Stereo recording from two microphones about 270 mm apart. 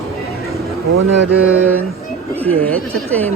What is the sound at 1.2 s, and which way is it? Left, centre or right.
Mantra, right.